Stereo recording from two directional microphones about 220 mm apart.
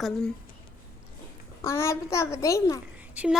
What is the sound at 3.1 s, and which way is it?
Speech, 5° right (ahead or behind).